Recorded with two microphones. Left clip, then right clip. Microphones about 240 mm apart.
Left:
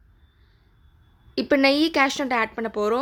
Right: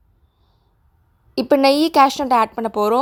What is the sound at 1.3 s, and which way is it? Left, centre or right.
A woman's voice, centre.